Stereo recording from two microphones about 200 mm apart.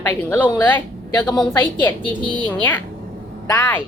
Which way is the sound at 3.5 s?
10° left (ahead or behind).